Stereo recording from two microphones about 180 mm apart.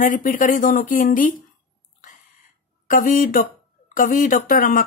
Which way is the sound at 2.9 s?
50° left (ahead or behind).